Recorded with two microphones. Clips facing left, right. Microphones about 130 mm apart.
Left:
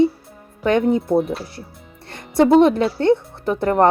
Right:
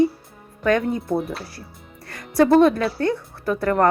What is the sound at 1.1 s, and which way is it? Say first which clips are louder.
Speech: left 6 dB; centre (ahead or behind).